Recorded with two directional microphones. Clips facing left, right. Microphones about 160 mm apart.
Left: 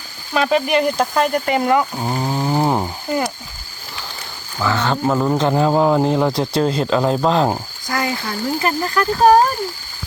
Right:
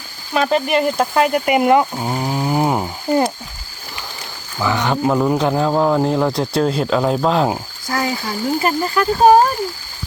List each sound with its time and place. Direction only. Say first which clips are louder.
0.3 s speech: even; centre (ahead or behind); by 1.9 s 20° right (ahead or behind)
2.0 s a sound: even; 5° right (ahead or behind)
3.1 s speech: right 5 dB; 30° right (ahead or behind)
4.6 s speech: right 1 dB; 15° right (ahead or behind)
5.1 s speech: left 1 dB; centre (ahead or behind)